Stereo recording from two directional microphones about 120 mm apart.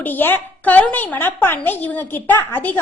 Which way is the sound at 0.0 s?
15° left (ahead or behind).